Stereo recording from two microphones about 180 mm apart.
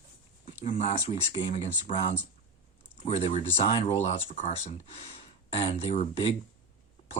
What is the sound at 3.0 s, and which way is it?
Speech, 35° left (ahead or behind).